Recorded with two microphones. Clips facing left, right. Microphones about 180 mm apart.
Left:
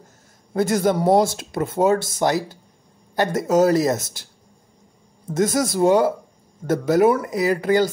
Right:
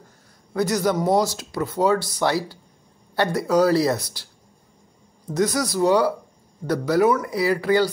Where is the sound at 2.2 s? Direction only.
20° left (ahead or behind).